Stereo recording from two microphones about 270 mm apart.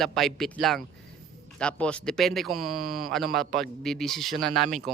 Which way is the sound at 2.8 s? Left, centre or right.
Right.